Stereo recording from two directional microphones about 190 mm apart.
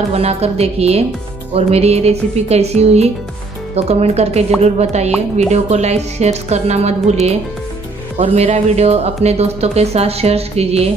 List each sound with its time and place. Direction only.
0.1 s speech: 30° right (ahead or behind)